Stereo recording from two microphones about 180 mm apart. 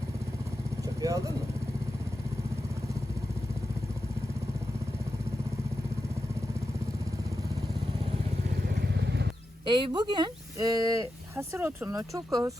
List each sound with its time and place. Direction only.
0.8 s vehicle: 20° right (ahead or behind)
8.6 s vehicle: 65° right (ahead or behind)
9.6 s speech: 25° right (ahead or behind)